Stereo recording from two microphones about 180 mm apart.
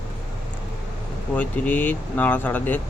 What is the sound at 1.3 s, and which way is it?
Speech, 10° left (ahead or behind).